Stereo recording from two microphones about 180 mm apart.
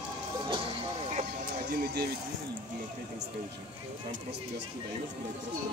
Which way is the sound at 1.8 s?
60° right (ahead or behind).